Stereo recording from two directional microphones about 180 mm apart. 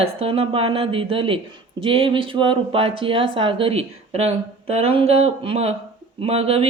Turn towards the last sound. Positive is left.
turn(degrees=-35)  # may be behind; listen again after turning